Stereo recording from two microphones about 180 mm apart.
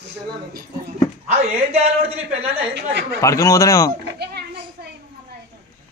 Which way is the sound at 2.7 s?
70° right (ahead or behind).